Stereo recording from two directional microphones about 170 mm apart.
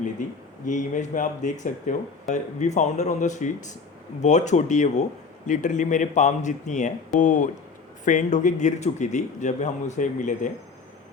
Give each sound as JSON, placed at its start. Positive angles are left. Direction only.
{"t": 0.2, "sound": "speech", "side_deg": 50}